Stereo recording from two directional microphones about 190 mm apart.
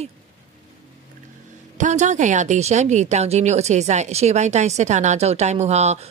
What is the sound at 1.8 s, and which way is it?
A woman's voice, 40° right (ahead or behind).